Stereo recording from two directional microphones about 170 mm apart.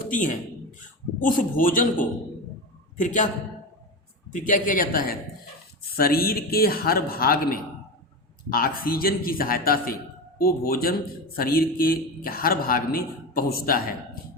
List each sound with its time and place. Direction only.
0.1 s a man's voice: 50° left (ahead or behind)
4.3 s a man's voice: 50° left (ahead or behind)